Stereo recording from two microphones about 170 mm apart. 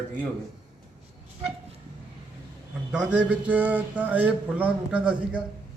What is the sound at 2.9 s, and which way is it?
Speech, 5° right (ahead or behind).